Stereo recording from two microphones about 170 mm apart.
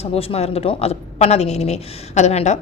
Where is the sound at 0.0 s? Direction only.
35° left (ahead or behind).